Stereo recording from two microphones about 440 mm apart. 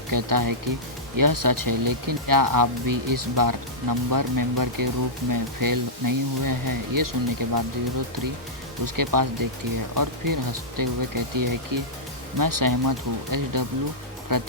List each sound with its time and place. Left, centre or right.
0.1 s speech: right